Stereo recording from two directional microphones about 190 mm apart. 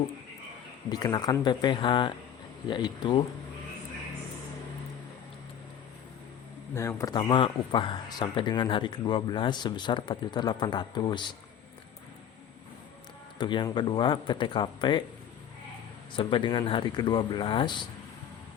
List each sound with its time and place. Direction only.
0.9 s speech: 20° left (ahead or behind)
6.7 s speech: 15° left (ahead or behind)
13.4 s speech: 25° left (ahead or behind)
16.1 s speech: 25° left (ahead or behind)